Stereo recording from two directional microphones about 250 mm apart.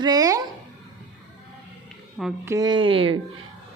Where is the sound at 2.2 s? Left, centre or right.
Centre.